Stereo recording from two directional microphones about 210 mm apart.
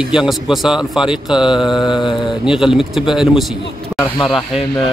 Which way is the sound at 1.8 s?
20° left (ahead or behind).